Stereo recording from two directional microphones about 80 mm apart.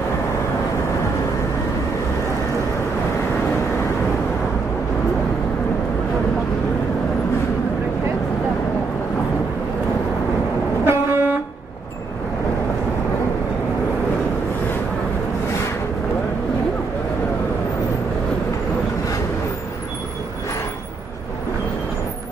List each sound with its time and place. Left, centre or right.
10.9 s vehicle: right